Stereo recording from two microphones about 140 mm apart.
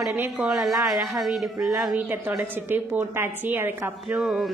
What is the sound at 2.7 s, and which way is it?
A woman's voice, 15° right (ahead or behind).